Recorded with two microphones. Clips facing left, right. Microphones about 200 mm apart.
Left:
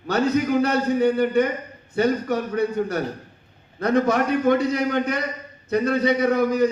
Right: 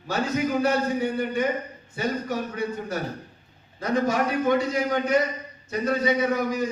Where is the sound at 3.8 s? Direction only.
60° left (ahead or behind).